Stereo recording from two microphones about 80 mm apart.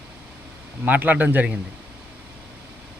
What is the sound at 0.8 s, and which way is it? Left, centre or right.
Speech, right.